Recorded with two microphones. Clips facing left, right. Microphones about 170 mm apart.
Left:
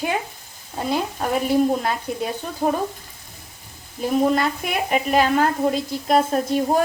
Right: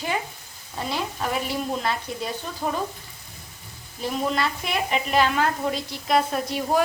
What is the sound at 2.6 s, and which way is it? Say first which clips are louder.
Speech: left 7 dB; 40° left (ahead or behind).